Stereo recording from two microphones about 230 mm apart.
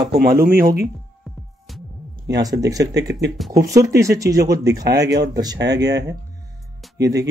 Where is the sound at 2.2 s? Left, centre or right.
Centre.